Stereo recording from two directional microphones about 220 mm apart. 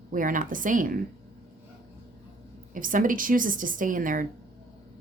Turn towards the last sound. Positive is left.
turn(degrees=-40)  # may be behind; listen again after turning